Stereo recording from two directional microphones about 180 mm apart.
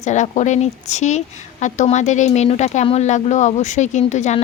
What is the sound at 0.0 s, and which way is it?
Speech, 40° left (ahead or behind).